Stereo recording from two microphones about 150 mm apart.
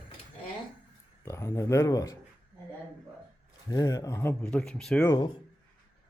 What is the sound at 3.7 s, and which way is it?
Speech, 25° left (ahead or behind).